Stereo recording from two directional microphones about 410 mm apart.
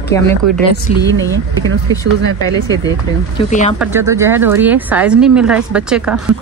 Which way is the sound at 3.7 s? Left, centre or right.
Centre.